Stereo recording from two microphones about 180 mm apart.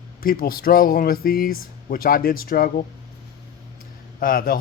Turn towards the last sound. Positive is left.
turn(degrees=55)  # may be behind; listen again after turning